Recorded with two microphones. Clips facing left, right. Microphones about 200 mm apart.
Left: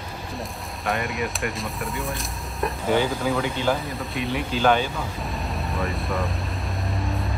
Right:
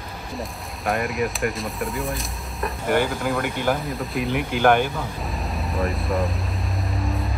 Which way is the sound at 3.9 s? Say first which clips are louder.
Right 3 dB; centre (ahead or behind).